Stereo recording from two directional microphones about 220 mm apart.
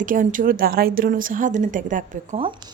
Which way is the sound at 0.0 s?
35° right (ahead or behind).